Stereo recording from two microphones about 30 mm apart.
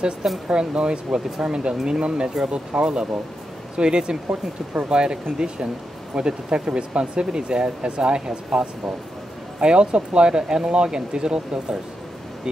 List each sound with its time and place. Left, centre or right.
0.5 s speech: right